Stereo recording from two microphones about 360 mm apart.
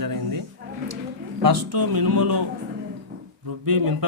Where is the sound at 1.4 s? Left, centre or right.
Right.